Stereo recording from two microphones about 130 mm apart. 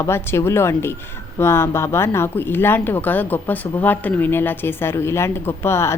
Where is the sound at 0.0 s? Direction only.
20° left (ahead or behind).